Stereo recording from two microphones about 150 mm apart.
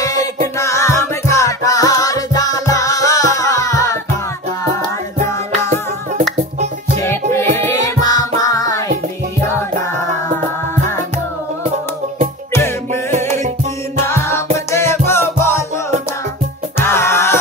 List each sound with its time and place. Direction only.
0.0 s music: 25° left (ahead or behind)
7.0 s music: 15° left (ahead or behind)
12.5 s music: 15° left (ahead or behind)
14.0 s music: 15° left (ahead or behind)
16.7 s music: 15° left (ahead or behind)